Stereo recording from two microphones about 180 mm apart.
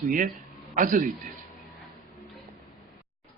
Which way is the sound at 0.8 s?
50° right (ahead or behind).